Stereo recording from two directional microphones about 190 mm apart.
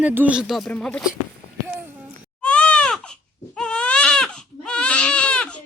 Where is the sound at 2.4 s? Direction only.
5° left (ahead or behind).